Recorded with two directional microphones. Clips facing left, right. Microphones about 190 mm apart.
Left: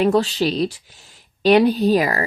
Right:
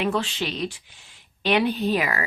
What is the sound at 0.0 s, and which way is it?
Speech, 40° left (ahead or behind).